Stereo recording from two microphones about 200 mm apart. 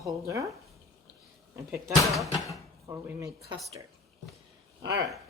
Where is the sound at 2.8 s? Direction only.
15° right (ahead or behind).